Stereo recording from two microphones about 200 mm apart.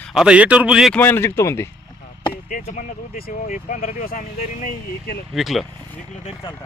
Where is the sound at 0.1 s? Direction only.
5° right (ahead or behind).